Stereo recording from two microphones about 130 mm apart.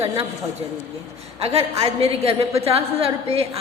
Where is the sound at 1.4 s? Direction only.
50° right (ahead or behind).